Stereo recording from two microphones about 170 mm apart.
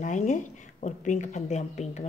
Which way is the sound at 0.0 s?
45° left (ahead or behind).